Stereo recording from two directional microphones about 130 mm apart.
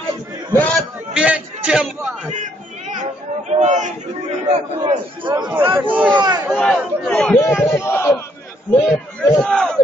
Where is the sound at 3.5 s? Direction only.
65° right (ahead or behind).